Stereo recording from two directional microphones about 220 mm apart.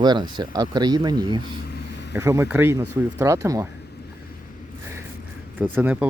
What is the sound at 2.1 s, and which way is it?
Speech, 10° right (ahead or behind).